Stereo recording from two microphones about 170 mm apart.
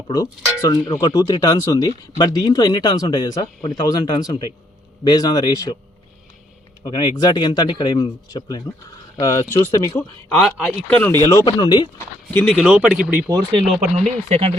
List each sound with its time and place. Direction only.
0.1 s speech: 20° left (ahead or behind)
6.8 s speech: 25° left (ahead or behind)
10.3 s speech: 5° left (ahead or behind)
11.2 s speech: 20° left (ahead or behind)
12.3 s speech: 10° left (ahead or behind)
12.5 s speech: 5° right (ahead or behind)
13.7 s speech: centre (ahead or behind)
14.3 s speech: 35° right (ahead or behind)